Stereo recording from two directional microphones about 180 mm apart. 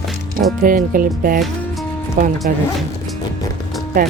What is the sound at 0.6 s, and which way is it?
Speech, 50° right (ahead or behind).